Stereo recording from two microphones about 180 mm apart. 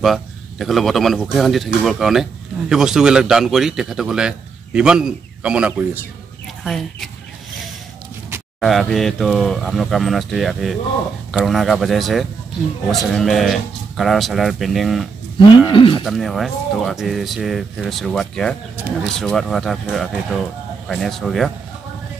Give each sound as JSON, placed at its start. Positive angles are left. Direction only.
{"t": 0.0, "sound": "a man's voice", "side_deg": 0}
{"t": 8.5, "sound": "a man's voice", "side_deg": 0}
{"t": 15.7, "sound": "speech", "side_deg": 25}
{"t": 16.0, "sound": "a man's voice", "side_deg": 0}